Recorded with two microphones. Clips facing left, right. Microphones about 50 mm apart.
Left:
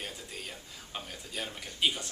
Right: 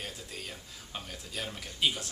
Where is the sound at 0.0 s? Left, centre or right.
Centre.